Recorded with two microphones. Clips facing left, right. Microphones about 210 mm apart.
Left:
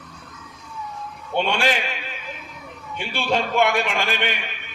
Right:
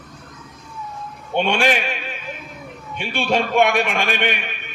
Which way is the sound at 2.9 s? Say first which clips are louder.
Right 3 dB; 15° right (ahead or behind).